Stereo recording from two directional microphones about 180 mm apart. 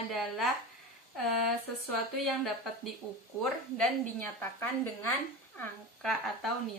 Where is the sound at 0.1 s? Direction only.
Centre (ahead or behind).